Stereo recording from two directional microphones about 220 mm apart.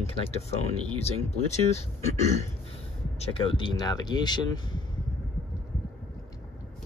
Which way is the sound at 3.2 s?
25° left (ahead or behind).